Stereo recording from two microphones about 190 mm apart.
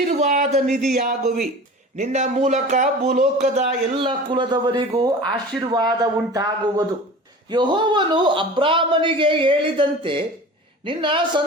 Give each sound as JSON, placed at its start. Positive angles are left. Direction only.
{"t": 0.1, "sound": "speech", "side_deg": -35}